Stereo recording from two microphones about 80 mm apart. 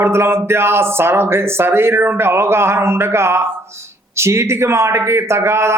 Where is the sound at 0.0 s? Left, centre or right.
Right.